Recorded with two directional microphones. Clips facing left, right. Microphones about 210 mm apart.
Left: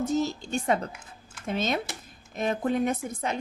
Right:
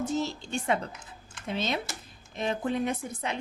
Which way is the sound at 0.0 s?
40° left (ahead or behind).